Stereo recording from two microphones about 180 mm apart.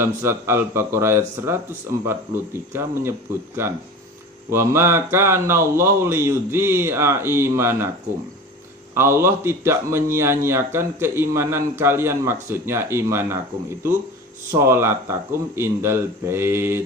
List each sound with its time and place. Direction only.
0.0 s a man's voice: 15° right (ahead or behind)
9.0 s a man's voice: 15° right (ahead or behind)
14.5 s a man's voice: 15° right (ahead or behind)